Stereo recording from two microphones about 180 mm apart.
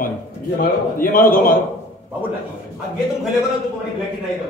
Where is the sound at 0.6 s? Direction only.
50° left (ahead or behind).